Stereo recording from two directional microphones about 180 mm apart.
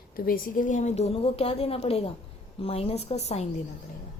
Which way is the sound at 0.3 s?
50° left (ahead or behind).